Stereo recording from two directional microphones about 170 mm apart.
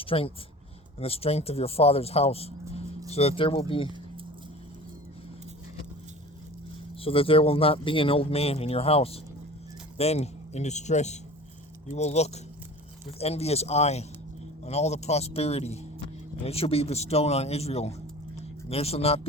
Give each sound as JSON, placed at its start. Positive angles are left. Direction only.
{"t": 0.0, "sound": "a man's voice", "side_deg": 35}
{"t": 7.0, "sound": "a man's voice", "side_deg": 35}